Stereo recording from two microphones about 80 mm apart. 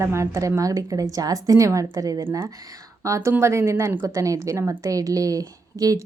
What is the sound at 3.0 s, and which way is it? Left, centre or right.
A woman's voice, right.